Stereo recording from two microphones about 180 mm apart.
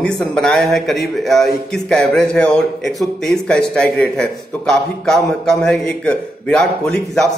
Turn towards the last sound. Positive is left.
turn(degrees=5)  # may be behind; listen again after turning